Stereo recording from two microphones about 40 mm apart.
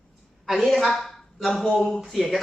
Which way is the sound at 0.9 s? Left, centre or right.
Centre.